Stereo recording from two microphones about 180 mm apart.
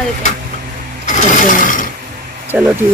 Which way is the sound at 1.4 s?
45° left (ahead or behind).